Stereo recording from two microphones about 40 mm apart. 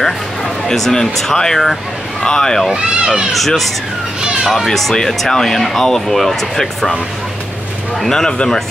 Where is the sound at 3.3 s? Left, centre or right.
Centre.